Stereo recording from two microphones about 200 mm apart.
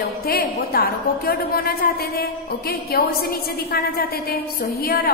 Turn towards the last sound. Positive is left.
turn(degrees=50)  # may be behind; listen again after turning